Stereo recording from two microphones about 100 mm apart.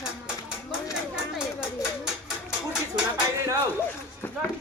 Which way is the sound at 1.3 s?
5° right (ahead or behind).